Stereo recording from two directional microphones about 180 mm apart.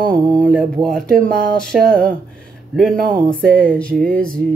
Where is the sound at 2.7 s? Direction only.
Centre (ahead or behind).